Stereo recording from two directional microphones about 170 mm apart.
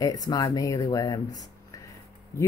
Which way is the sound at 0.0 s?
20° left (ahead or behind).